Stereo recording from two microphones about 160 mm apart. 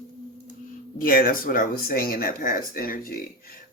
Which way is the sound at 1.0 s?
65° left (ahead or behind).